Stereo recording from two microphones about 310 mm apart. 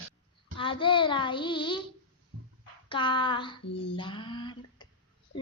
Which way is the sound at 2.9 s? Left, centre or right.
Centre.